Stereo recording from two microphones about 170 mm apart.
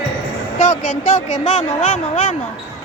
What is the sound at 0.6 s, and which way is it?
Speech, 45° left (ahead or behind).